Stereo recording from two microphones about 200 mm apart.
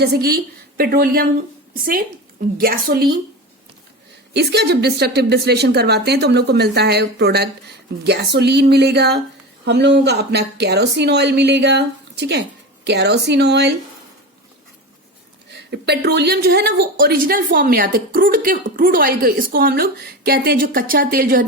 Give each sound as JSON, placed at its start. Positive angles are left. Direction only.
{"t": 0.0, "sound": "a woman's voice", "side_deg": -50}
{"t": 4.4, "sound": "a woman's voice", "side_deg": -55}
{"t": 15.5, "sound": "a woman's voice", "side_deg": -55}